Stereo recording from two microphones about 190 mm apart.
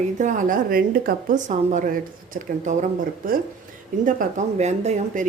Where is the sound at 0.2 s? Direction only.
40° right (ahead or behind).